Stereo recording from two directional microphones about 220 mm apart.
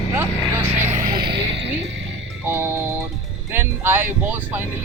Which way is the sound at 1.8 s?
55° right (ahead or behind).